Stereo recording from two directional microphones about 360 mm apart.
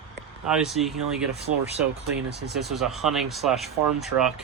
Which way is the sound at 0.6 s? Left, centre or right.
Centre.